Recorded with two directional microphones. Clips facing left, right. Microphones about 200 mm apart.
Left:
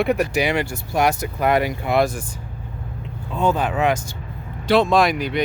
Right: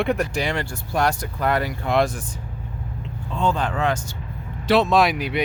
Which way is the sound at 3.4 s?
5° left (ahead or behind).